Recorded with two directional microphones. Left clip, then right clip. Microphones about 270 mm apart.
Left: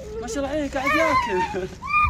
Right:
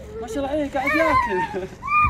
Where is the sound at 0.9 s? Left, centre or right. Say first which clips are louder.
Right 1 dB; left.